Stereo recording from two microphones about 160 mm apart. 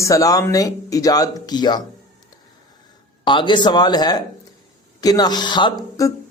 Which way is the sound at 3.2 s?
30° left (ahead or behind).